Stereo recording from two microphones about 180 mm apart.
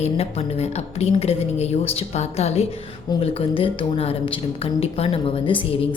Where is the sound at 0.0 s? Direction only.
35° left (ahead or behind).